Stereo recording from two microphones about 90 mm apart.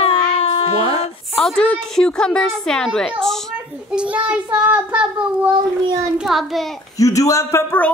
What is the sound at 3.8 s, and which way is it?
A child's voice, 10° right (ahead or behind).